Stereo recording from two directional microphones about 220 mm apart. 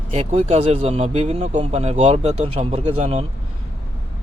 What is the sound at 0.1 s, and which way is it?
Speech, 30° right (ahead or behind).